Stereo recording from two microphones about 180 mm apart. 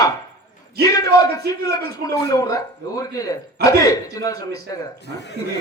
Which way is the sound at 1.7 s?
20° left (ahead or behind).